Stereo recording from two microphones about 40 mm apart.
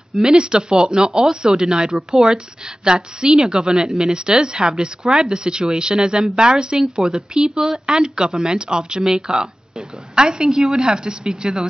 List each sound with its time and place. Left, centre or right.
0.2 s a woman's voice: right